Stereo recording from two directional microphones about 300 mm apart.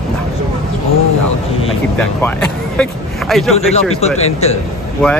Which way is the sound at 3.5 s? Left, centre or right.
Left.